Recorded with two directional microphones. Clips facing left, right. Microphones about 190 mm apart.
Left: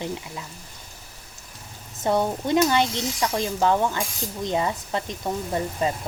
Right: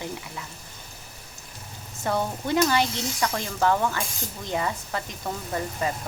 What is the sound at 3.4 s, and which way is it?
Speech, 20° left (ahead or behind).